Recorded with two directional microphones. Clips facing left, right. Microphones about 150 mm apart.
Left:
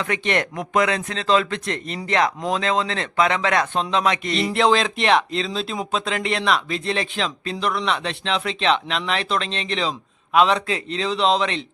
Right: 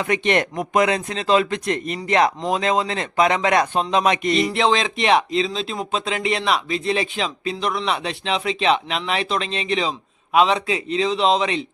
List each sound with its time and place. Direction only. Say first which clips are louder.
0.0 s speech: right 3 dB; 20° right (ahead or behind)
4.4 s speech: even; 5° right (ahead or behind)